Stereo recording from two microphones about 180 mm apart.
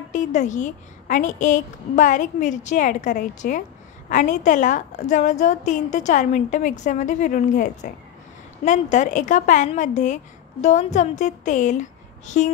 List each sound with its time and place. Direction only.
0.1 s a woman's voice: 45° left (ahead or behind)